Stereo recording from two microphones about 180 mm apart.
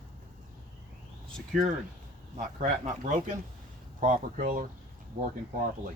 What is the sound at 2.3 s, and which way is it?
Speech, 45° right (ahead or behind).